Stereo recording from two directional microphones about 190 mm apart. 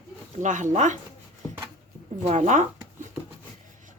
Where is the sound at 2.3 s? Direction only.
35° right (ahead or behind).